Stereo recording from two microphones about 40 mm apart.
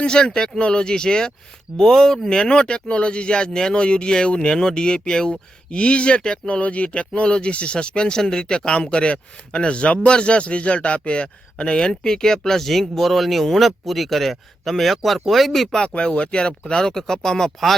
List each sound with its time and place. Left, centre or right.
0.0 s speech: left
6.5 s speech: left; by 15.7 s centre
15.7 s speech: left